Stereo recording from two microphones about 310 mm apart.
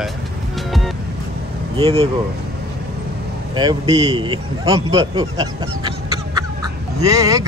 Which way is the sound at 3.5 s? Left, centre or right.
Centre.